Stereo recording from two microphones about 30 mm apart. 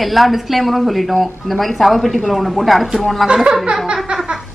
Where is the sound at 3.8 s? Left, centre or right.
Right.